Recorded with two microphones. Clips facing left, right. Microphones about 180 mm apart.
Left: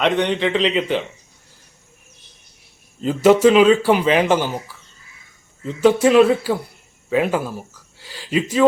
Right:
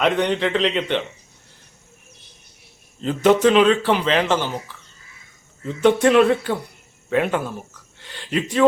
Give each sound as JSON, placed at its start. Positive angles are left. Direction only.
{"t": 0.0, "sound": "speech", "side_deg": 0}
{"t": 3.0, "sound": "speech", "side_deg": 5}